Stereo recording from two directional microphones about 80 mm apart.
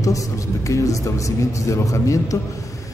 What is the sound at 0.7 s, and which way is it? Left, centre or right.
A man's voice, left.